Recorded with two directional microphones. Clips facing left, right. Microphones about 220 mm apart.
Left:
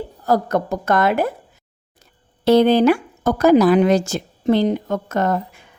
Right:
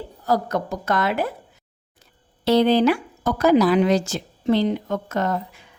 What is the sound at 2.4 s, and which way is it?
A woman's voice, 50° left (ahead or behind).